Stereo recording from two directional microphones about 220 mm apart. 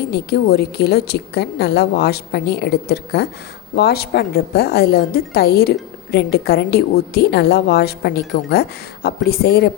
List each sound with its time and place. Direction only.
0.1 s a woman's voice: 45° left (ahead or behind)